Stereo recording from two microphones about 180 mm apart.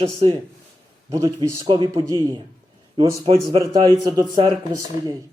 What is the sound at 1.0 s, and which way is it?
A man's voice, 15° right (ahead or behind).